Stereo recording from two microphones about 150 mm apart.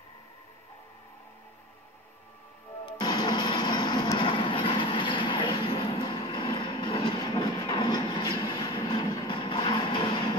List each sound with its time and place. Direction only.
3.0 s music: 30° left (ahead or behind)
4.2 s train: 35° left (ahead or behind)